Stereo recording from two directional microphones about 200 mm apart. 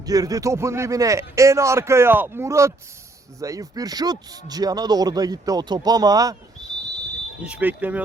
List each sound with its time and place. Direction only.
0.0 s speech: 20° right (ahead or behind)
7.4 s speech: 10° right (ahead or behind)